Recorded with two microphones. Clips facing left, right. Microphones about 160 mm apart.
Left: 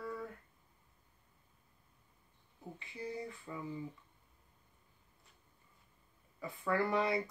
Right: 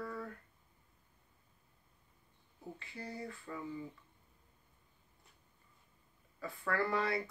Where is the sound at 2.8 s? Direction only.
15° left (ahead or behind).